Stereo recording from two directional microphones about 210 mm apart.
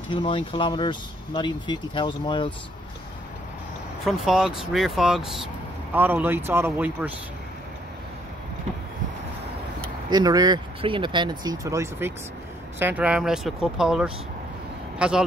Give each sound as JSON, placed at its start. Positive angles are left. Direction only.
{"t": 0.1, "sound": "speech", "side_deg": 25}
{"t": 4.0, "sound": "speech", "side_deg": 0}
{"t": 10.0, "sound": "speech", "side_deg": -20}